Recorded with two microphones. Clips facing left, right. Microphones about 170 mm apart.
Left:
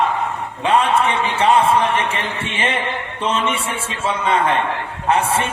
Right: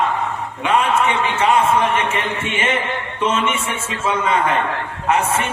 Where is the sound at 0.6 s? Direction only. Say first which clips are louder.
Left 1 dB; 30° left (ahead or behind).